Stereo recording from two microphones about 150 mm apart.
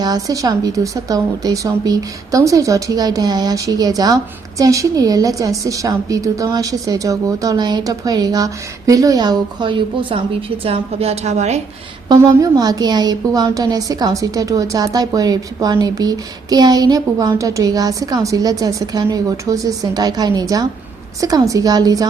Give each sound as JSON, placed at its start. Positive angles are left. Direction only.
{"t": 0.0, "sound": "a woman's voice", "side_deg": -25}
{"t": 12.0, "sound": "a woman's voice", "side_deg": -25}